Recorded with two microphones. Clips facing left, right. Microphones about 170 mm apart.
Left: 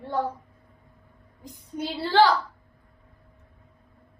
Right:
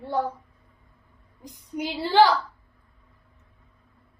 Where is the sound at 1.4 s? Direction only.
15° right (ahead or behind).